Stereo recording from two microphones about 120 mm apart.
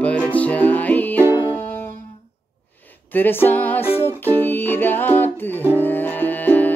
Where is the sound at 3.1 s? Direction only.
15° left (ahead or behind).